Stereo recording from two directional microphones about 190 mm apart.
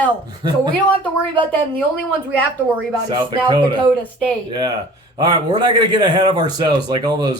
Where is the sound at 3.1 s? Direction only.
25° right (ahead or behind).